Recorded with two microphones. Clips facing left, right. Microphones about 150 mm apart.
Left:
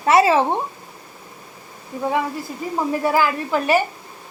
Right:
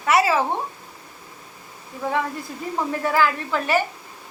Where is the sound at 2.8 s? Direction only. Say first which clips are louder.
Left 2 dB; 15° left (ahead or behind).